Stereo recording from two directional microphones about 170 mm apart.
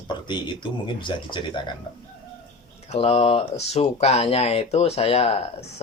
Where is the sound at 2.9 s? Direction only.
35° left (ahead or behind).